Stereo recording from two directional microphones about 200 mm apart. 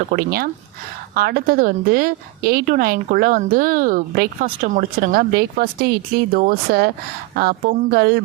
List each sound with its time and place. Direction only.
0.1 s a woman's voice: 50° right (ahead or behind)